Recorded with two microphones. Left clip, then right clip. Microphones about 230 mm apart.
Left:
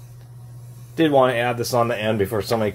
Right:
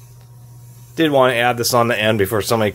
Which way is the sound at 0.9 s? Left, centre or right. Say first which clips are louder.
Right 3 dB; right.